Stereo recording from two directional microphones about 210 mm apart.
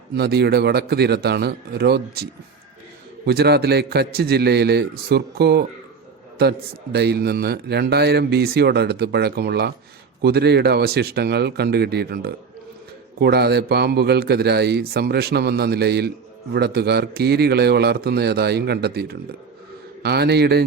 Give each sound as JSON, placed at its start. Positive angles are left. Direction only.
{"t": 0.2, "sound": "a man's voice", "side_deg": -50}
{"t": 3.2, "sound": "a man's voice", "side_deg": -50}